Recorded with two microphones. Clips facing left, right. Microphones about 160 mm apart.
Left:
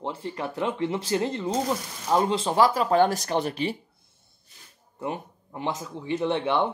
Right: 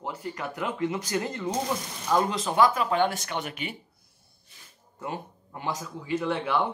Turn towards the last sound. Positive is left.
turn(degrees=25)  # may be behind; listen again after turning